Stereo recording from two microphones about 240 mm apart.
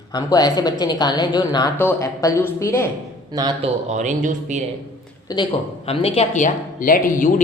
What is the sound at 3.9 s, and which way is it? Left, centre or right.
Speech, right.